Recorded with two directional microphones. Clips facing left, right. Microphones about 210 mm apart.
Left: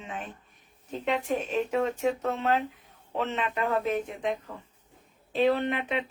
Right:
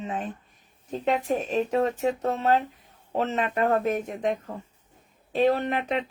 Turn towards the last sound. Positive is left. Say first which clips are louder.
# right 2 dB
turn(degrees=-40)  # may be behind; listen again after turning